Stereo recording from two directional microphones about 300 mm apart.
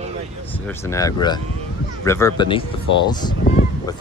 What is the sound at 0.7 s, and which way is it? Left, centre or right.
Speech, centre.